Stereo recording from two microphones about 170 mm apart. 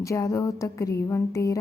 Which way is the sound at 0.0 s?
20° left (ahead or behind).